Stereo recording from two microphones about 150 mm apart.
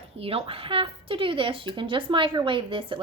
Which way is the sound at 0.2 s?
40° right (ahead or behind).